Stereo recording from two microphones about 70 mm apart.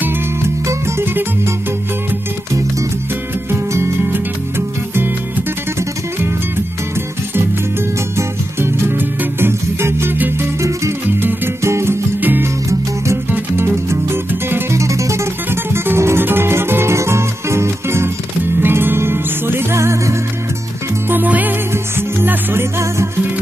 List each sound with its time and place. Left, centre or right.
0.7 s music: right
3.4 s music: right
8.2 s music: right
12.2 s music: right
12.6 s music: right
13.3 s music: right
21.1 s music: right